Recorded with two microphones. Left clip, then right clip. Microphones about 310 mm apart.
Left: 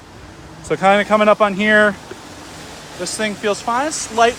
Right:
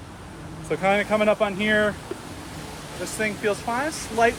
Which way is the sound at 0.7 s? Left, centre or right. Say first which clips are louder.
Left 8 dB; left.